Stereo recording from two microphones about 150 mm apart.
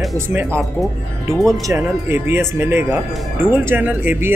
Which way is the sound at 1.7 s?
15° right (ahead or behind).